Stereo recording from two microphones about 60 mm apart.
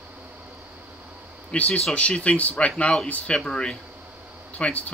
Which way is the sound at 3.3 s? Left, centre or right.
Centre.